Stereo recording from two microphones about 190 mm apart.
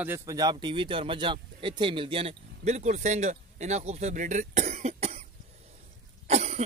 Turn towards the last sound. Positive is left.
turn(degrees=-35)  # may be behind; listen again after turning